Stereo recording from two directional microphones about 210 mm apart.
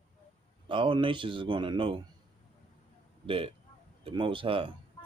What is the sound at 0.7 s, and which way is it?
Speech, 25° right (ahead or behind).